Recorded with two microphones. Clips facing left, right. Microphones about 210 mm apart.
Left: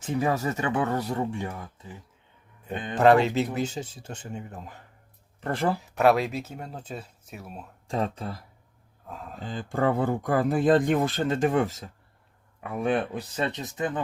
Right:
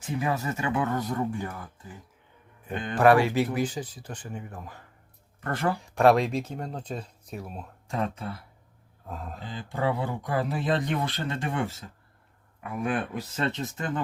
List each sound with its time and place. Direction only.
0.2 s speech: 40° left (ahead or behind)
5.7 s speech: 5° left (ahead or behind)
7.9 s speech: 30° left (ahead or behind)
9.0 s speech: centre (ahead or behind)
9.4 s speech: 45° left (ahead or behind)
12.9 s speech: 20° left (ahead or behind)